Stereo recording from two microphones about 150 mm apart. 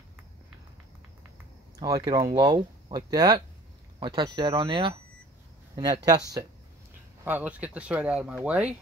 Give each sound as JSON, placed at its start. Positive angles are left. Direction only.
{"t": 2.0, "sound": "speech", "side_deg": -30}
{"t": 7.2, "sound": "speech", "side_deg": -10}